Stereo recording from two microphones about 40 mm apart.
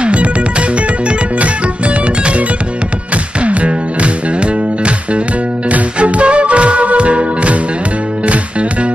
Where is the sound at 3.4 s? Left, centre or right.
Right.